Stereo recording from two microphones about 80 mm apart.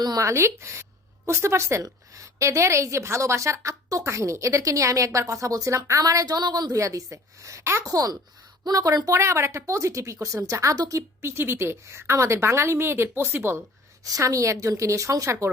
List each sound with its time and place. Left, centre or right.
0.2 s a woman's voice: right
6.7 s a woman's voice: right
7.9 s a woman's voice: right
11.2 s a woman's voice: right
14.0 s a woman's voice: right